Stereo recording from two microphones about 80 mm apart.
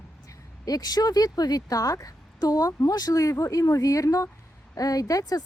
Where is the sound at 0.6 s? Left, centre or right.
Left.